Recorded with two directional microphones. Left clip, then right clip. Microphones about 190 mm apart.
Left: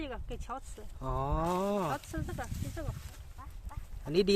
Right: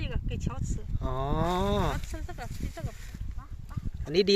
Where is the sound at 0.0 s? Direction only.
30° left (ahead or behind).